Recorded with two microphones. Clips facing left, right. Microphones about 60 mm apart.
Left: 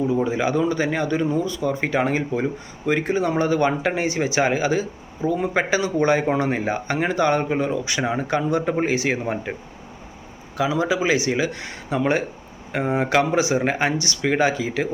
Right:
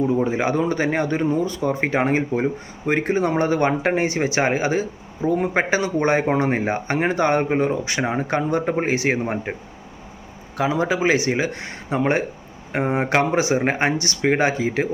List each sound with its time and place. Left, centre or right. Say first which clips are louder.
0.3 s speech: even; right
8.1 s speech: even; right
10.6 s speech: right 1 dB; right